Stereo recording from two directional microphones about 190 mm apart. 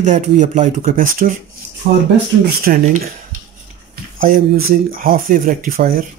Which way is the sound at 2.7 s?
50° right (ahead or behind).